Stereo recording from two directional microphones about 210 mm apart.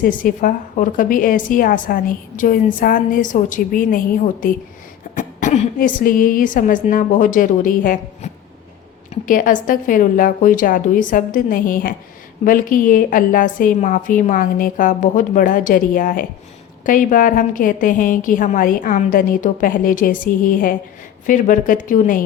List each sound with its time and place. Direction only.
0.0 s a woman's voice: 40° left (ahead or behind)